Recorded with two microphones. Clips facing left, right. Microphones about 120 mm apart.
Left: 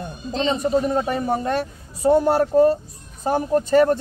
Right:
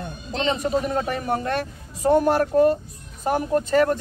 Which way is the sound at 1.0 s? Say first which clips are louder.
Left 3 dB; 25° left (ahead or behind).